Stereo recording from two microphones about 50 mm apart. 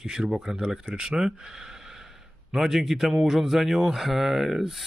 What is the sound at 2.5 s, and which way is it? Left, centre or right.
A man's voice, centre.